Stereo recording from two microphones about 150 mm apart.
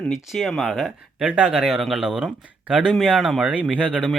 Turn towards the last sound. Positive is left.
turn(degrees=-5)  # may be behind; listen again after turning